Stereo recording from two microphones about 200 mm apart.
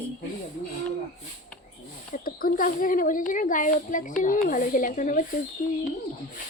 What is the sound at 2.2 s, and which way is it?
Speech, 45° left (ahead or behind).